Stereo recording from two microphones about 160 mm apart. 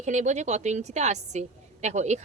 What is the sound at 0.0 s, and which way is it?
A woman's voice, 45° right (ahead or behind).